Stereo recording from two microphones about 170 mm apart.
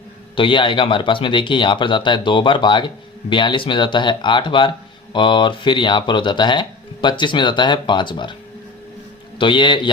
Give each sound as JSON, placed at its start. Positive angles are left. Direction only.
{"t": 0.3, "sound": "speech", "side_deg": 30}
{"t": 9.4, "sound": "speech", "side_deg": 30}